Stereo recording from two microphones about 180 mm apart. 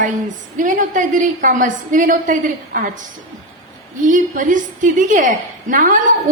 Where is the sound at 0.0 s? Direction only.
45° right (ahead or behind).